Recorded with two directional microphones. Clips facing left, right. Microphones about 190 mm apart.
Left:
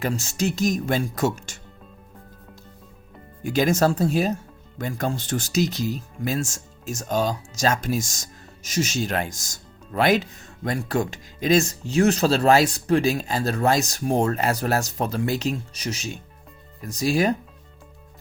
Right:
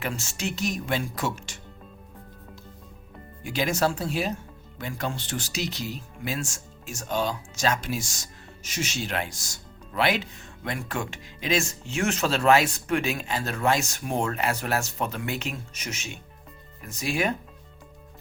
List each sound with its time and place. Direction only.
0.0 s speech: 40° left (ahead or behind)
3.4 s speech: 45° left (ahead or behind)